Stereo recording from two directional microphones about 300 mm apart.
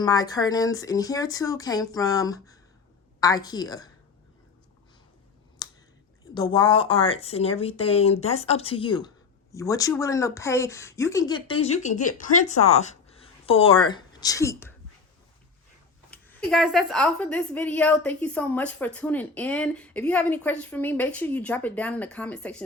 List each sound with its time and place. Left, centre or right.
0.0 s speech: centre
6.3 s speech: centre
16.0 s a woman's voice: centre